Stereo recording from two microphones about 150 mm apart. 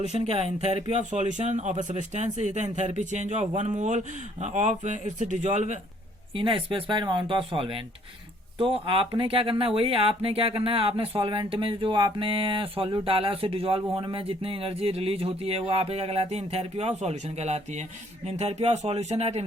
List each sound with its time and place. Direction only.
0.0 s speech: 45° right (ahead or behind)
6.3 s speech: 35° right (ahead or behind)